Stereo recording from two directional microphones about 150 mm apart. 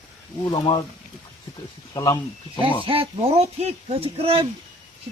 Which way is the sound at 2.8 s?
35° right (ahead or behind).